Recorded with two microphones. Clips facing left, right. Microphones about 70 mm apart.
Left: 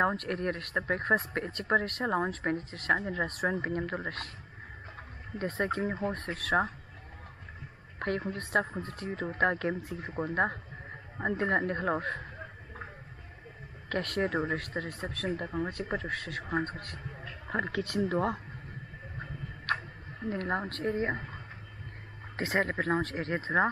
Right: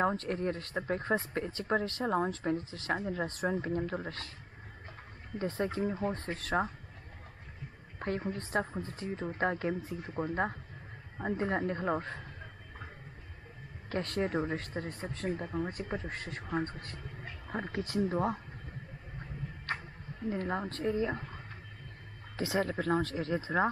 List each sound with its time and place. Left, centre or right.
0.0 s speech: left
5.4 s speech: left
8.0 s a woman's voice: left
13.8 s speech: left
18.1 s speech: left
19.7 s a sound: left
20.2 s speech: left
22.4 s speech: left